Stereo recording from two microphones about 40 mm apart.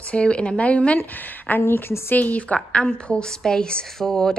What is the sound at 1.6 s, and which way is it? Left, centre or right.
Speech, left.